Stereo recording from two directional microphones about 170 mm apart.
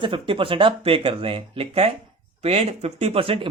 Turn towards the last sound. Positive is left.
turn(degrees=-30)  # may be behind; listen again after turning